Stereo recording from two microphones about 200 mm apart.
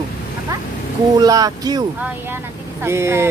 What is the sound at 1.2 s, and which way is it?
Speech, 15° right (ahead or behind).